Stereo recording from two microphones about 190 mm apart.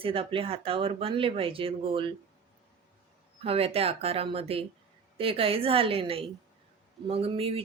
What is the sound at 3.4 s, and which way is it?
Speech, 30° right (ahead or behind).